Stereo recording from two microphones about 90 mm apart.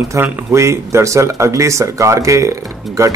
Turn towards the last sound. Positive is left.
turn(degrees=-35)  # may be behind; listen again after turning